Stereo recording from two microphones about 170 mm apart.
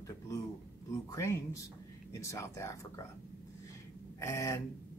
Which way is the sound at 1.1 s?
15° left (ahead or behind).